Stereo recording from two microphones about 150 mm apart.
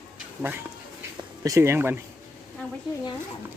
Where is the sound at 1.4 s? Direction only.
20° right (ahead or behind).